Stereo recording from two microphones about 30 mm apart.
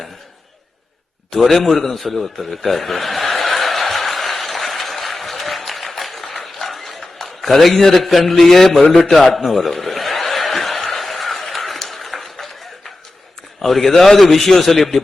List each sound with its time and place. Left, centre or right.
1.4 s a man's voice: centre
1.8 s chuckle: centre
7.4 s a man's voice: centre
8.9 s chuckle: centre
11.4 s a sound: centre
13.6 s a man's voice: centre